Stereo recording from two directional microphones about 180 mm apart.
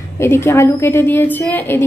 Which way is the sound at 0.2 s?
15° left (ahead or behind).